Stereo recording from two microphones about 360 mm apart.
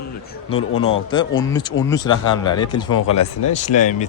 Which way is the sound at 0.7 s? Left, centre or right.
Left.